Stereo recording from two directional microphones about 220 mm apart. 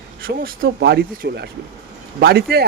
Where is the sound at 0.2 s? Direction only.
40° right (ahead or behind).